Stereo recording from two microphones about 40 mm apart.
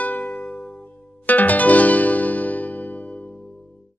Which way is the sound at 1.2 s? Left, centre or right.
Left.